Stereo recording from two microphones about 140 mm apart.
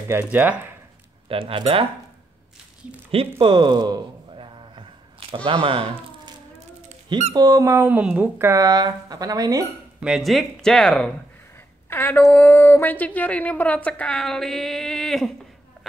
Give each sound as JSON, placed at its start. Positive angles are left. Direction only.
{"t": 0.1, "sound": "speech", "side_deg": -10}
{"t": 1.3, "sound": "speech", "side_deg": -40}
{"t": 3.1, "sound": "speech", "side_deg": -40}
{"t": 7.3, "sound": "speech", "side_deg": -25}
{"t": 7.9, "sound": "speech", "side_deg": -10}
{"t": 10.0, "sound": "speech", "side_deg": 0}
{"t": 11.9, "sound": "a woman's voice", "side_deg": 15}